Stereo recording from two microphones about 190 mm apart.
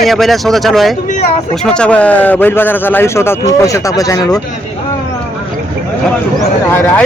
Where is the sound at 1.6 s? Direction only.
5° left (ahead or behind).